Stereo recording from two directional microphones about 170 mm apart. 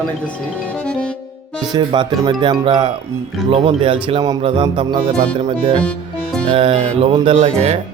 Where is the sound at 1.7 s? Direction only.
30° right (ahead or behind).